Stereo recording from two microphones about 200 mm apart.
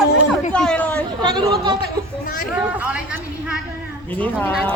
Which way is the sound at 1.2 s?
20° right (ahead or behind).